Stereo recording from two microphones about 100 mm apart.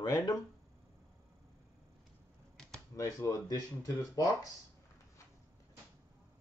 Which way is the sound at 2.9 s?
30° left (ahead or behind).